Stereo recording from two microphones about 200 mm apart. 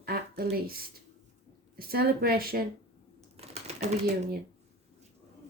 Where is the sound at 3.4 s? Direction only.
30° right (ahead or behind).